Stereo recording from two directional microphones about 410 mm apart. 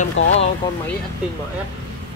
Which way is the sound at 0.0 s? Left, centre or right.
Centre.